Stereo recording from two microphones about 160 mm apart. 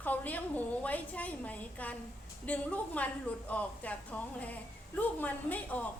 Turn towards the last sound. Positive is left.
turn(degrees=10)  # may be behind; listen again after turning